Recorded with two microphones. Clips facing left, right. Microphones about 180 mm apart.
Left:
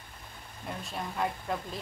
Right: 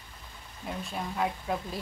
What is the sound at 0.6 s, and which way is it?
Speech, centre (ahead or behind).